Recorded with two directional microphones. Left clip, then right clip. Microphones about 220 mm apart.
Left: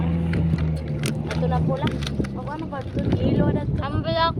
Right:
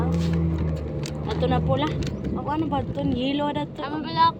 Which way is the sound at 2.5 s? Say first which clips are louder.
Right 5 dB; 40° right (ahead or behind).